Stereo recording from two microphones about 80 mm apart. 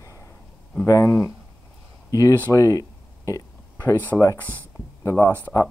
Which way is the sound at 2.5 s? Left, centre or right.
Left.